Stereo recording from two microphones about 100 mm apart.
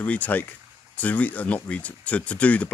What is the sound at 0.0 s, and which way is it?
A man's voice, 15° left (ahead or behind).